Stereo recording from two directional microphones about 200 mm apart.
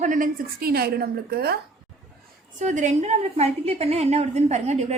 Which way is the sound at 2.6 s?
35° right (ahead or behind).